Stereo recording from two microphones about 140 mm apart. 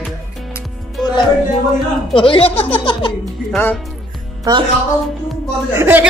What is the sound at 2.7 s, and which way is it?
Music, 35° left (ahead or behind).